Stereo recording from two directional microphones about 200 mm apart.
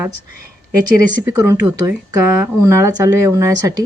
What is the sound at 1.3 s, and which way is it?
Speech, 15° right (ahead or behind).